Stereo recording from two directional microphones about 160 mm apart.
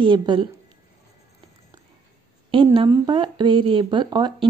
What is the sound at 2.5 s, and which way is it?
Speech, 35° right (ahead or behind).